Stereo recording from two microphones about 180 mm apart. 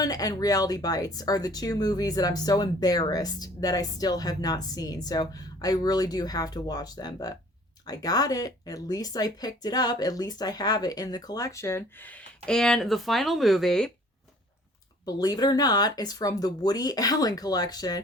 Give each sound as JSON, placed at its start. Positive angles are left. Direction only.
{"t": 0.0, "sound": "speech", "side_deg": 20}
{"t": 15.0, "sound": "speech", "side_deg": 20}